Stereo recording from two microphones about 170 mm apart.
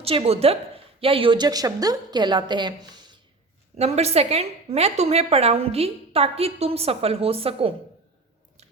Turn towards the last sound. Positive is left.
turn(degrees=-35)  # may be behind; listen again after turning